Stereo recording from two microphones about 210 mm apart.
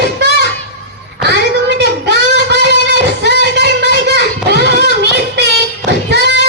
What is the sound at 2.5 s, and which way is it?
Music, 55° right (ahead or behind).